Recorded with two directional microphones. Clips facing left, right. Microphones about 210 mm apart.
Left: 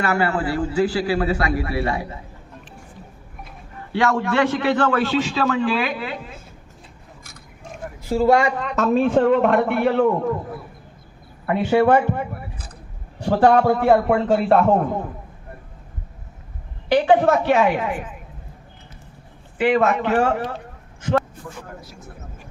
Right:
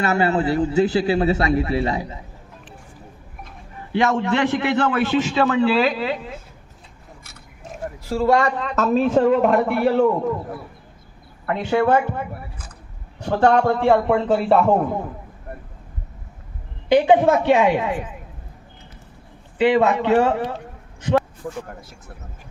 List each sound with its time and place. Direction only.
0.0 s a man's voice: 20° right (ahead or behind)
3.9 s a man's voice: 20° right (ahead or behind)
8.1 s speech: 5° left (ahead or behind)
11.4 s a man's voice: 15° left (ahead or behind)
13.2 s a man's voice: 10° left (ahead or behind)
16.9 s a man's voice: 20° right (ahead or behind)
19.5 s a man's voice: 25° right (ahead or behind)